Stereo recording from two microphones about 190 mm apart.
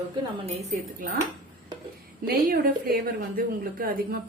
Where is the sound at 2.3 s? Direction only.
50° right (ahead or behind).